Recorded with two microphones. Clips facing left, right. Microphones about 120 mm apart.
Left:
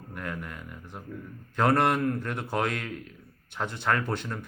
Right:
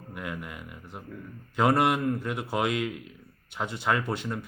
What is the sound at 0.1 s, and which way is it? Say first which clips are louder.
Speech: even; 10° right (ahead or behind).